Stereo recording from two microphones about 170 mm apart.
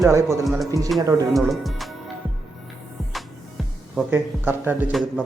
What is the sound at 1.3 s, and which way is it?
Speech, centre (ahead or behind).